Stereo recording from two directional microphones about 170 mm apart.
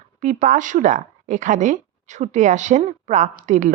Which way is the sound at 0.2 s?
45° right (ahead or behind).